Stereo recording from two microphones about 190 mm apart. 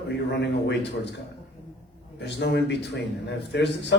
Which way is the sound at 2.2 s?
65° left (ahead or behind).